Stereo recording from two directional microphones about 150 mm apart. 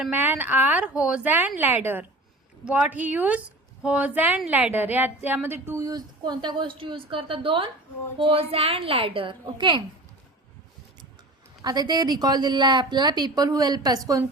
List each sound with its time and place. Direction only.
0.0 s a woman's voice: 15° right (ahead or behind); by 9.8 s 30° right (ahead or behind)
11.6 s a woman's voice: 25° right (ahead or behind)